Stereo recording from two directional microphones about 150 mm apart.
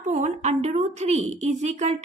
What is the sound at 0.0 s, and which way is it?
A woman's voice, 50° right (ahead or behind).